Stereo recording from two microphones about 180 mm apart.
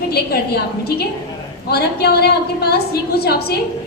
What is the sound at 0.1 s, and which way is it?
A woman's voice, 60° left (ahead or behind).